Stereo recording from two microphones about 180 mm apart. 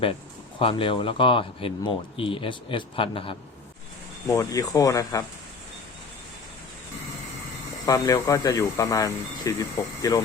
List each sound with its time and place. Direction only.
0.6 s speech: 30° left (ahead or behind)
4.3 s speech: 20° left (ahead or behind)
7.9 s speech: 20° left (ahead or behind)